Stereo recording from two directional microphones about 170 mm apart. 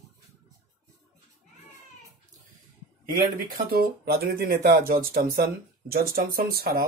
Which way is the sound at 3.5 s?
60° right (ahead or behind).